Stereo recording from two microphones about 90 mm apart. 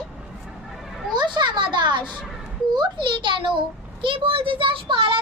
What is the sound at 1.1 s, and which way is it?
A child's voice, 55° right (ahead or behind).